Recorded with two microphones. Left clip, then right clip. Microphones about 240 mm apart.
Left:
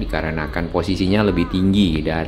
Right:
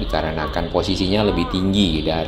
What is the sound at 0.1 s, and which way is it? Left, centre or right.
Speech, left.